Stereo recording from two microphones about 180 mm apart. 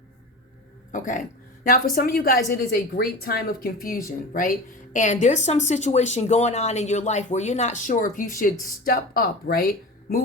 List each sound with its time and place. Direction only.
0.9 s a woman's voice: 45° left (ahead or behind)